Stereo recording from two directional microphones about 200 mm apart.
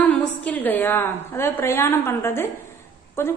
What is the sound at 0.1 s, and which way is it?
A woman's voice, 5° left (ahead or behind).